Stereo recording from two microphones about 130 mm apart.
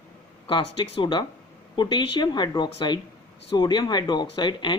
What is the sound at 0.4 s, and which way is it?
Speech, 40° left (ahead or behind).